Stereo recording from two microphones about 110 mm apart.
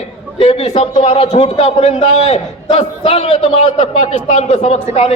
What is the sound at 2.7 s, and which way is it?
A man's voice, 80° left.